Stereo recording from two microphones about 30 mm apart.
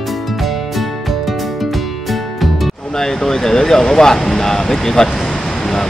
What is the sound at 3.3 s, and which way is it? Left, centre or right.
Speech, centre.